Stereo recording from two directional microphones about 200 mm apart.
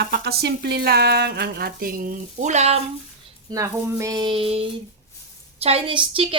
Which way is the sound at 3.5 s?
15° right (ahead or behind).